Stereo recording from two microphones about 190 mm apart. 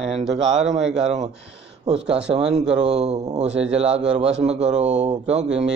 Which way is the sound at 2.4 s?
5° right (ahead or behind).